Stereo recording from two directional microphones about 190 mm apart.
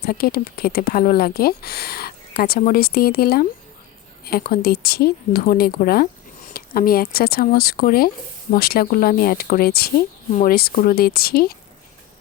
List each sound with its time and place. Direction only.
0.0 s speech: 50° left (ahead or behind)